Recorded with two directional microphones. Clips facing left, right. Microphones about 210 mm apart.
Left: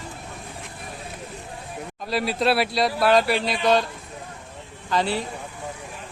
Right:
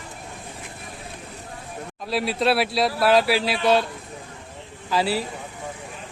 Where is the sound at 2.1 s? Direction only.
Centre (ahead or behind).